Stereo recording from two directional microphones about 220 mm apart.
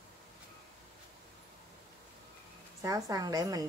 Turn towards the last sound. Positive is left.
turn(degrees=-15)  # may be behind; listen again after turning